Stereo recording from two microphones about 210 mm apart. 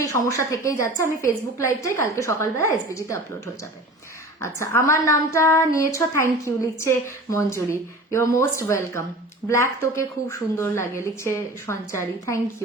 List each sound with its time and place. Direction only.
0.0 s speech: 15° left (ahead or behind)